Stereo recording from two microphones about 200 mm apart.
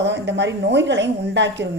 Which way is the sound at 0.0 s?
60° right (ahead or behind).